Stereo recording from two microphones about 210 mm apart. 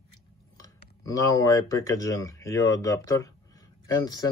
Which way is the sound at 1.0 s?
15° left (ahead or behind).